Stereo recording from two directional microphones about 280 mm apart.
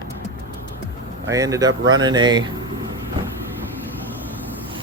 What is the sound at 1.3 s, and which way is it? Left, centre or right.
Speech, centre.